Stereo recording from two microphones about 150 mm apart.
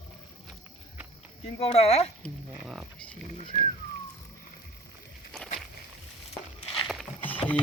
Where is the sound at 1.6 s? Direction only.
45° left (ahead or behind).